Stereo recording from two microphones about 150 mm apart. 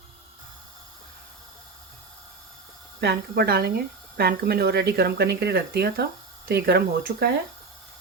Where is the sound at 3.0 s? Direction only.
90° right.